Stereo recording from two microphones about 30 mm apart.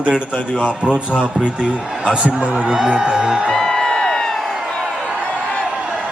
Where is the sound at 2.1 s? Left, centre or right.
Right.